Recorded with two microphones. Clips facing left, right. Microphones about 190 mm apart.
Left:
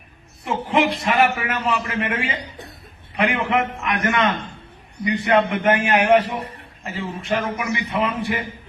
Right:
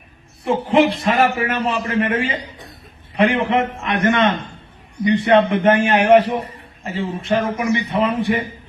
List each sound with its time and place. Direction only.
0.4 s a man's voice: 30° right (ahead or behind)